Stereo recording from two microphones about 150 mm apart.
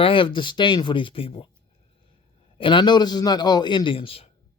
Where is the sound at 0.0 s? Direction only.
35° left (ahead or behind).